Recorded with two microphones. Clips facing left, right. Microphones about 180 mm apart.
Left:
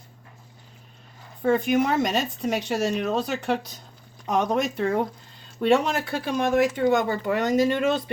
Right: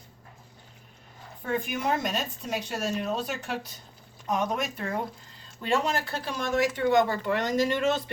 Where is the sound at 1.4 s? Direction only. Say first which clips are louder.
Left 9 dB; 80° left; by 6.7 s 60° left (ahead or behind).